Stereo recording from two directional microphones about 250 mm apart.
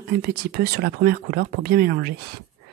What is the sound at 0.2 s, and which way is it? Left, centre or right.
Speech, right.